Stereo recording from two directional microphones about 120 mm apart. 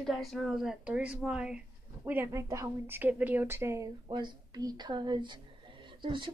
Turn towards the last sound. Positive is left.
turn(degrees=-40)  # may be behind; listen again after turning